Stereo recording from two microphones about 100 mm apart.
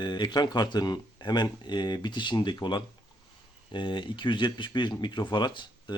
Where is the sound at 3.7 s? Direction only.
50° left (ahead or behind).